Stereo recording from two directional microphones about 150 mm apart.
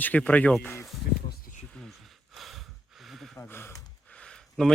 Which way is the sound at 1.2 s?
70° left (ahead or behind).